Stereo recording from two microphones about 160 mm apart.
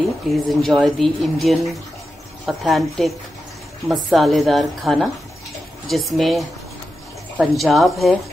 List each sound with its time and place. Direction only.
0.3 s speech: centre (ahead or behind)